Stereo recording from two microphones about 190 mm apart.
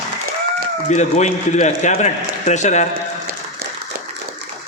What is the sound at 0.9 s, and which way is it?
A man's voice, 40° left (ahead or behind).